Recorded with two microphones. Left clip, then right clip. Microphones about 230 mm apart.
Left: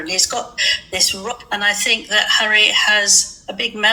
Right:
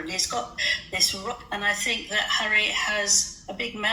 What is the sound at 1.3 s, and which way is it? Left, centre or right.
A woman's voice, left.